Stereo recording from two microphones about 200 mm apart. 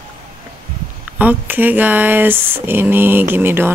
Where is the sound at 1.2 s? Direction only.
10° right (ahead or behind).